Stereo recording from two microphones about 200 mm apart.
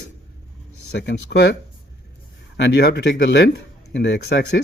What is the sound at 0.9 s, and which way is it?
Speech, 60° left (ahead or behind).